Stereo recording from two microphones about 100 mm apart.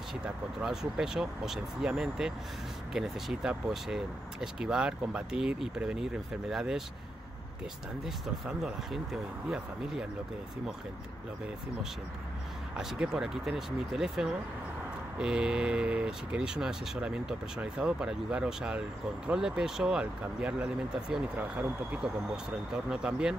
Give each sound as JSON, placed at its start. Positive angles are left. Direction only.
{"t": 0.6, "sound": "speech", "side_deg": -5}
{"t": 8.0, "sound": "speech", "side_deg": -5}
{"t": 12.7, "sound": "speech", "side_deg": -5}